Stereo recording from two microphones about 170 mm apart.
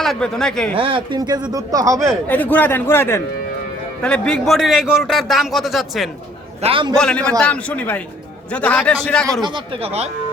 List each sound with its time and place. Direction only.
0.0 s a man's voice: centre (ahead or behind)
0.8 s speech: 30° right (ahead or behind)
2.2 s a man's voice: 10° left (ahead or behind)
6.6 s speech: 30° right (ahead or behind)
6.9 s a man's voice: 5° left (ahead or behind)
9.4 s speech: 35° right (ahead or behind)